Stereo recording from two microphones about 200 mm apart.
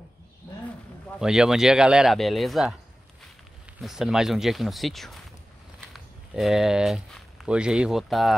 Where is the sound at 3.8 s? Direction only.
Centre (ahead or behind).